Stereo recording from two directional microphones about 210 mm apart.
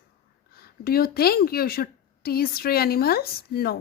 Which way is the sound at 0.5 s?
45° left (ahead or behind).